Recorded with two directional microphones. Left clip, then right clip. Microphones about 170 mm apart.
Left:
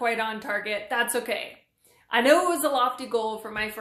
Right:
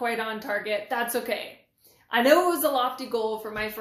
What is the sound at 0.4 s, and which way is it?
Speech, 20° left (ahead or behind).